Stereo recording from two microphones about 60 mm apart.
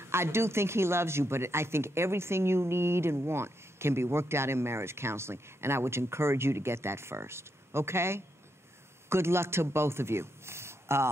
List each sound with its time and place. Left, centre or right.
0.0 s a man's voice: right